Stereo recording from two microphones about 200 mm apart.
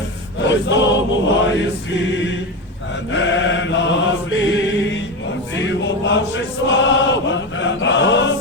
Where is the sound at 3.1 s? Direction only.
65° left (ahead or behind).